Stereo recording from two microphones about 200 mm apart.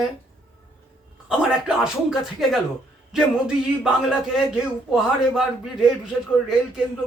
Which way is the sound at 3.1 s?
5° right (ahead or behind).